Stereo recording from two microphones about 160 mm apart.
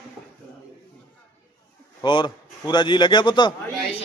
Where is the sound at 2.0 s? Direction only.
30° left (ahead or behind).